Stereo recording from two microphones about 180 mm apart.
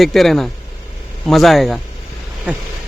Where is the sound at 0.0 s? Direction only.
Centre (ahead or behind).